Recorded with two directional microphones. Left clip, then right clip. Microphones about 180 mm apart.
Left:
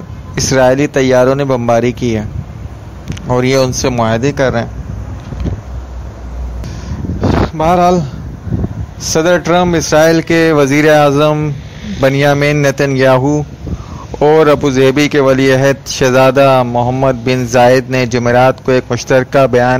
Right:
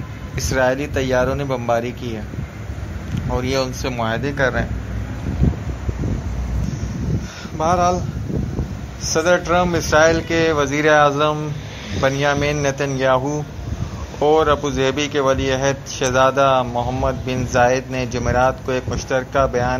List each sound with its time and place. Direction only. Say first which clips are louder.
0.4 s a man's voice: left 9 dB; 50° left (ahead or behind)
7.5 s a man's voice: left 6 dB; 45° left (ahead or behind)
9.1 s a man's voice: left 6 dB; 45° left (ahead or behind)
14.2 s a man's voice: left 7 dB; 45° left (ahead or behind)